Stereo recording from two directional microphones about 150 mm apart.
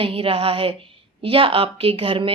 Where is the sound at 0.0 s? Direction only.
40° right (ahead or behind).